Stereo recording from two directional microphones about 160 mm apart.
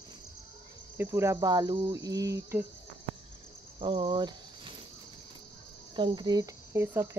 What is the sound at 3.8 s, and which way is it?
Speech, 30° right (ahead or behind).